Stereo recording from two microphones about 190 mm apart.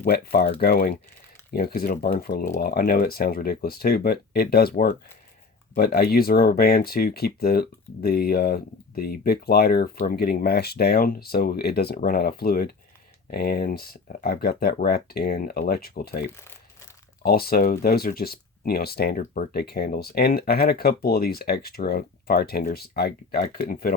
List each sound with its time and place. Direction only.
0.0 s speech: 55° left (ahead or behind)
5.7 s speech: 55° left (ahead or behind)
17.2 s speech: 55° left (ahead or behind)
19.2 s speech: 45° left (ahead or behind)